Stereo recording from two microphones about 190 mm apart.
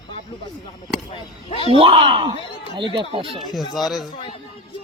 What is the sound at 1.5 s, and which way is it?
Speech, 30° left (ahead or behind).